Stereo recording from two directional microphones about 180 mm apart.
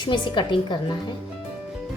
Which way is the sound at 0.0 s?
25° left (ahead or behind).